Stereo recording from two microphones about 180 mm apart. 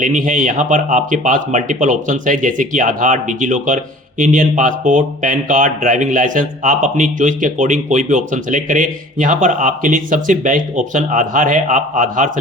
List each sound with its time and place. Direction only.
0.0 s speech: 45° right (ahead or behind)